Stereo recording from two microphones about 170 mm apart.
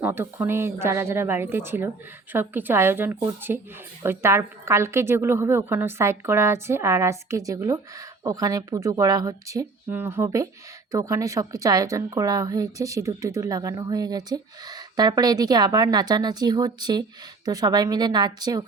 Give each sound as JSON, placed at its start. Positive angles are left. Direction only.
{"t": 0.0, "sound": "a woman's voice", "side_deg": -10}